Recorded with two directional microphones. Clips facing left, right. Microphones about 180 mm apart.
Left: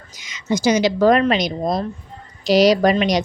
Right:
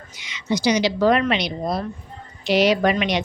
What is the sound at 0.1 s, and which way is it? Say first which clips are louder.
A woman's voice: left 2 dB; 45° left (ahead or behind).